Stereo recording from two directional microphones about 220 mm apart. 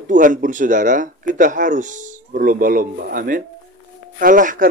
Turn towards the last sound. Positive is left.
turn(degrees=-35)  # may be behind; listen again after turning